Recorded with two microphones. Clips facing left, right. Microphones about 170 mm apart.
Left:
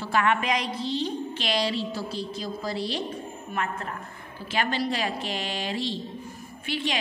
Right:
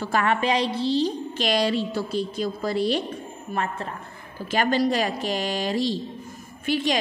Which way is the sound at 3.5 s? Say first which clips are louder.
Right 3 dB; 30° right (ahead or behind).